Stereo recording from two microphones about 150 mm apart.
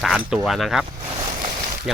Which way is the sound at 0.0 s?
Centre (ahead or behind).